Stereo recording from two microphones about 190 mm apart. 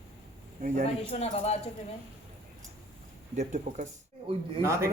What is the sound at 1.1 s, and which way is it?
Speech, 30° left (ahead or behind).